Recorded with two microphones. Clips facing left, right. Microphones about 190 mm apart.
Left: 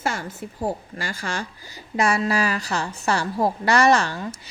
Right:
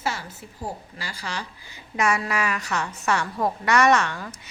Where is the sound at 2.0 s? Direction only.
30° left (ahead or behind).